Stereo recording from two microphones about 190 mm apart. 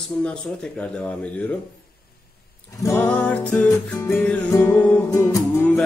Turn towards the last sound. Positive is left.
turn(degrees=10)  # may be behind; listen again after turning